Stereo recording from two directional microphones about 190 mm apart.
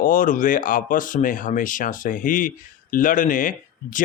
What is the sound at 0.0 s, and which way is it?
Speech, 45° left (ahead or behind).